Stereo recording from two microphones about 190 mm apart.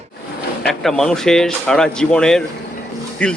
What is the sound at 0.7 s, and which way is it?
Speech, 5° left (ahead or behind).